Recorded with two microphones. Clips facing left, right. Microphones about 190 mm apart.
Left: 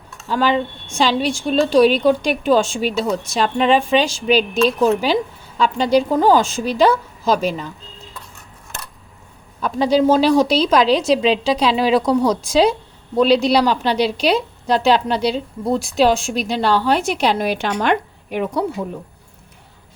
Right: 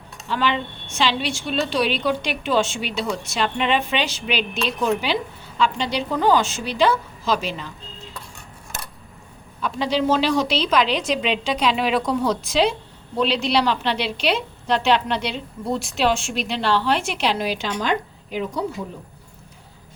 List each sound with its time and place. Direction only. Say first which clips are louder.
0.3 s a woman's voice: left 5 dB; 40° left (ahead or behind)
9.6 s a woman's voice: left 6 dB; 45° left (ahead or behind); by 18.6 s 60° left (ahead or behind)